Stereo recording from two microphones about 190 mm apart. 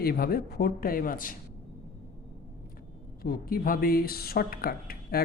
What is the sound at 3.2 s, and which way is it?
A woman's voice, 50° left (ahead or behind).